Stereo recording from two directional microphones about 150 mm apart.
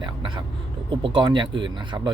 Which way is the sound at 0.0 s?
35° right (ahead or behind).